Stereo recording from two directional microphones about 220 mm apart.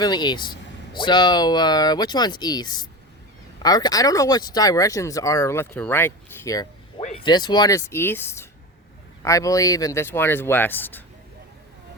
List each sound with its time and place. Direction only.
0.0 s speech: 20° left (ahead or behind)